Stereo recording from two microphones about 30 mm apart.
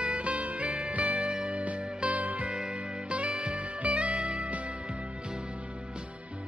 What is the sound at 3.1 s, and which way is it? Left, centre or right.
Music, right.